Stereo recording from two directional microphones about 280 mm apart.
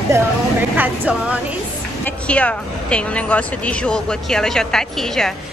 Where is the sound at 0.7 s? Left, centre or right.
Centre.